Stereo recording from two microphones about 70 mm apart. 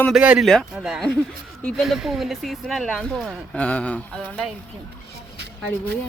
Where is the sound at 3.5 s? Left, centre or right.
Centre.